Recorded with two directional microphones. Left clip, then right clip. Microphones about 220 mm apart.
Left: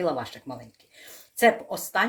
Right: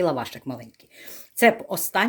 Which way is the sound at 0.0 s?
50° right (ahead or behind).